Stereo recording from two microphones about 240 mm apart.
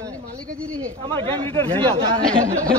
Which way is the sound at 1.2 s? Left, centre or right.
Right.